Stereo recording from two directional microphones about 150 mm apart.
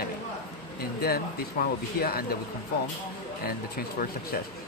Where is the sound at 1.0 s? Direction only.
90° left.